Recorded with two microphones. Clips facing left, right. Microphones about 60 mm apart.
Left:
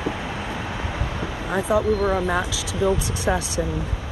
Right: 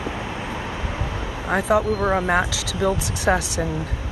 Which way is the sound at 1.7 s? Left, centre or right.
Right.